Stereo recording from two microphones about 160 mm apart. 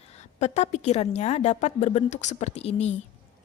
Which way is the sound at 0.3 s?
45° left (ahead or behind).